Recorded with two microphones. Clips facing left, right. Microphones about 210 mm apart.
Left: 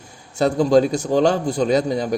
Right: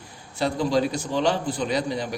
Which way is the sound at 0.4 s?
45° left (ahead or behind).